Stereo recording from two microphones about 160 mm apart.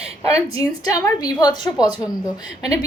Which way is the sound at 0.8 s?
25° left (ahead or behind).